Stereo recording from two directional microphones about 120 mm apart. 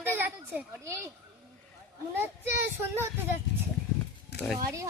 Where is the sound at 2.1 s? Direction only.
20° right (ahead or behind).